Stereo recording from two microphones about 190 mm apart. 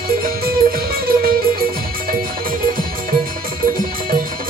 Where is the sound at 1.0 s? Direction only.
50° right (ahead or behind).